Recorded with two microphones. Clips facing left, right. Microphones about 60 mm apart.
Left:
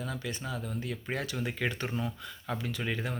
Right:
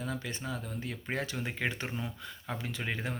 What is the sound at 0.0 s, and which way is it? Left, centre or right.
Speech, right.